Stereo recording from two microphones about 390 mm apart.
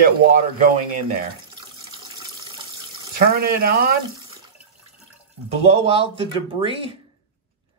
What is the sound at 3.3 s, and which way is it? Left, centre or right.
Speech, right.